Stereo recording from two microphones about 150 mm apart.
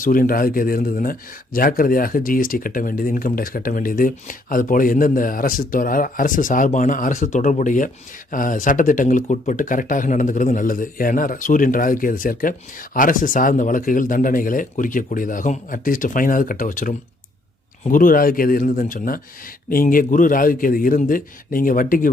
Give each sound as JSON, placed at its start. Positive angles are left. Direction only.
{"t": 0.0, "sound": "speech", "side_deg": 70}